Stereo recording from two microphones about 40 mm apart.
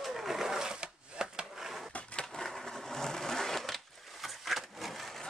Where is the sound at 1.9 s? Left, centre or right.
Left.